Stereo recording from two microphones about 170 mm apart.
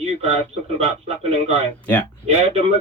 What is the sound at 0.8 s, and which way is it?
A man's voice, 40° right (ahead or behind).